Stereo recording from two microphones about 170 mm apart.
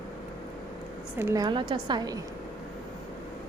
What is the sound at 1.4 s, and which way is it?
Speech, 30° right (ahead or behind).